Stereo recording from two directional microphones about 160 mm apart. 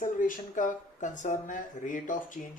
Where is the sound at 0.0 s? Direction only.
55° left (ahead or behind).